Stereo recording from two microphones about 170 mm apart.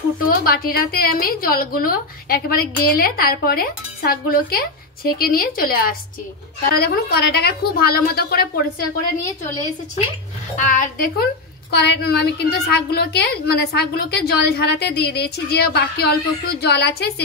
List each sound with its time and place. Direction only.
0.2 s a woman's voice: 60° left (ahead or behind)
10.6 s a woman's voice: 55° left (ahead or behind)
11.7 s a woman's voice: 80° left